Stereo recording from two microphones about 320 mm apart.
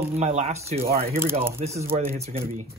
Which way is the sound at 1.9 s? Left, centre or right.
Centre.